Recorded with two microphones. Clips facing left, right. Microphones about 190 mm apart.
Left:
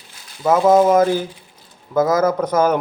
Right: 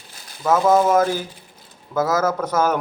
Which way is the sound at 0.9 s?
10° left (ahead or behind).